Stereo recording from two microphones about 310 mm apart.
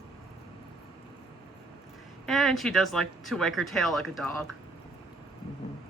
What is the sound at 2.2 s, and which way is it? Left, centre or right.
Speech, centre.